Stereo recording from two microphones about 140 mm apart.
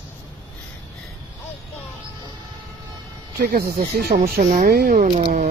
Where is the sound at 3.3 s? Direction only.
90° right.